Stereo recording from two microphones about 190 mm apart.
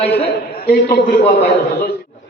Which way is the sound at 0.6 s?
50° left (ahead or behind).